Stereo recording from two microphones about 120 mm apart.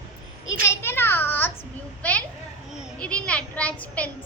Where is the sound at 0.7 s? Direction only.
20° left (ahead or behind).